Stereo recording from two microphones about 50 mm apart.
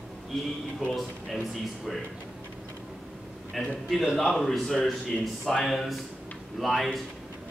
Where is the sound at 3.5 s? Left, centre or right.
Centre.